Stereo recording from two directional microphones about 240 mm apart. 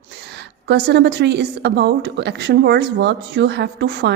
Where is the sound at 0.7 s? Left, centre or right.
Right.